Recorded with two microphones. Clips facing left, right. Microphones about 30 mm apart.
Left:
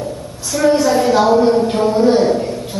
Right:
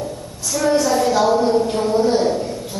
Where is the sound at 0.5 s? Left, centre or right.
Centre.